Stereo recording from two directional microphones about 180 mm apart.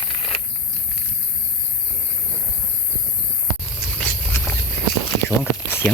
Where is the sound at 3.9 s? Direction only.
5° left (ahead or behind).